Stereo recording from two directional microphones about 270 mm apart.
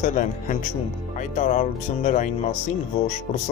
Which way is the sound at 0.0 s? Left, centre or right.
Left.